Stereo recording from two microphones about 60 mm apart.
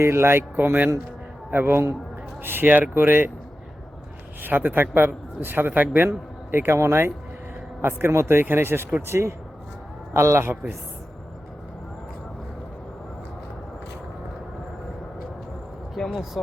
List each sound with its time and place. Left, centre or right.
0.0 s a man's voice: right
4.4 s a man's voice: right
16.0 s a sound: centre